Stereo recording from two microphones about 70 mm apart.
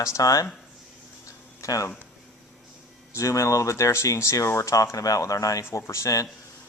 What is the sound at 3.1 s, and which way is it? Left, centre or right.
Speech, left.